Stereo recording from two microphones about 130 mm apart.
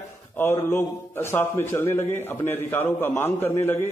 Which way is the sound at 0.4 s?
20° left (ahead or behind).